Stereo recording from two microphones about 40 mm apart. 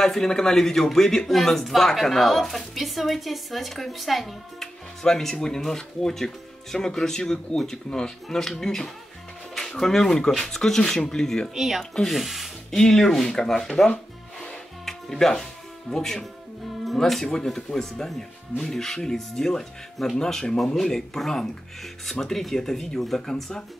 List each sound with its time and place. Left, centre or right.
0.0 s a woman's voice: centre
11.5 s speech: centre
11.9 s speech: centre
12.2 s a woman's voice: centre
12.7 s speech: centre
14.9 s speech: centre
17.3 s speech: centre